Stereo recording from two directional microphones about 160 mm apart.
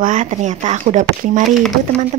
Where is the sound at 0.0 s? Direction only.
50° right (ahead or behind).